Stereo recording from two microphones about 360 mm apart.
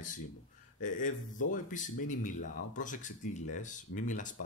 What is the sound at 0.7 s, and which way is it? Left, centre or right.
Speech, left.